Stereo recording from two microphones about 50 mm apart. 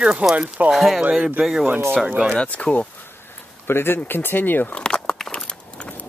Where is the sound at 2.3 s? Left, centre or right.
Left.